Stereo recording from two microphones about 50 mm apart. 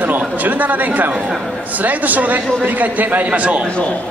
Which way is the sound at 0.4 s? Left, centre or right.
Right.